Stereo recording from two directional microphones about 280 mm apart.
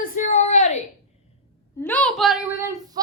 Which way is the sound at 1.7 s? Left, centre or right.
Centre.